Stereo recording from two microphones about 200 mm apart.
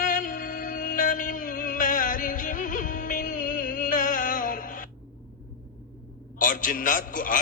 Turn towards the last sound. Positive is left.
turn(degrees=45)  # may be behind; listen again after turning